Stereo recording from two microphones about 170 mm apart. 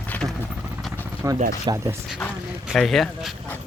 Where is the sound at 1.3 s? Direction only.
45° right (ahead or behind).